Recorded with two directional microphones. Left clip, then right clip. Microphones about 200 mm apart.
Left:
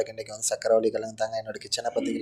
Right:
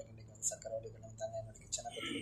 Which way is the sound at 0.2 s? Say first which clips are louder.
Left 16 dB; 45° left (ahead or behind).